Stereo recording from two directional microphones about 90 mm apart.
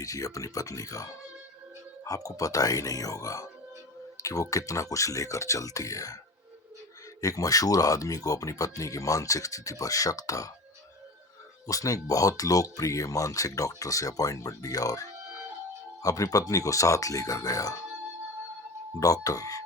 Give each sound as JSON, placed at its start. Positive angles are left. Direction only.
{"t": 0.0, "sound": "speech", "side_deg": 40}
{"t": 7.2, "sound": "speech", "side_deg": 40}
{"t": 11.6, "sound": "speech", "side_deg": 40}
{"t": 18.9, "sound": "speech", "side_deg": 40}